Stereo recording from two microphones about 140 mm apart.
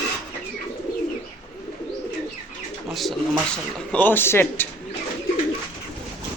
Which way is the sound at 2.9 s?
Centre (ahead or behind).